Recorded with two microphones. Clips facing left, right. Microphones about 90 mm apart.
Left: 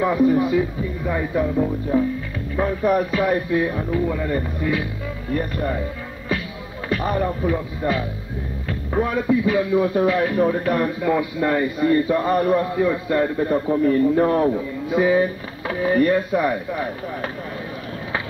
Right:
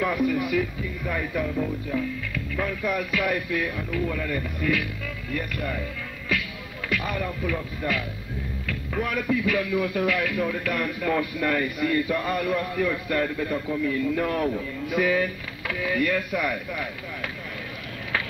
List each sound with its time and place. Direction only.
0.0 s a man's voice: 25° left (ahead or behind)